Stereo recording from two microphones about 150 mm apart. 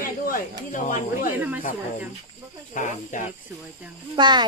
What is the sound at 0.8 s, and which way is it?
Speech, 60° left (ahead or behind).